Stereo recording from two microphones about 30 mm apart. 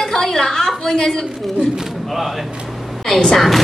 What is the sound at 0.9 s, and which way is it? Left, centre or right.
Speech, centre.